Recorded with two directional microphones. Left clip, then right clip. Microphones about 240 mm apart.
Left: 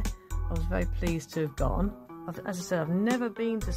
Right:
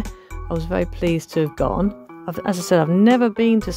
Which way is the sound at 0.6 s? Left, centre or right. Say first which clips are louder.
Right 11 dB; right.